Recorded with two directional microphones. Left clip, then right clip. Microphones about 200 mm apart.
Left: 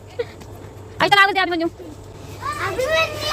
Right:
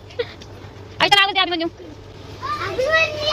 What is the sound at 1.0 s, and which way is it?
Speech, 20° left (ahead or behind).